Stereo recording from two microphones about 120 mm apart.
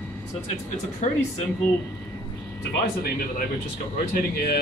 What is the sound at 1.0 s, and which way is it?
Speech, 90° left.